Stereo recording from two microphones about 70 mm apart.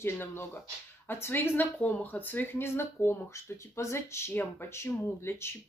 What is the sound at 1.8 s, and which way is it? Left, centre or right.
Speech, left.